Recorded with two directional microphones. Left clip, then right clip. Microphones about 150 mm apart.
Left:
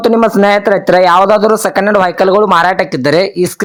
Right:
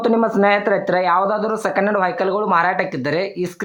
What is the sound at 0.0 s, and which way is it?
A man's voice, 40° left (ahead or behind).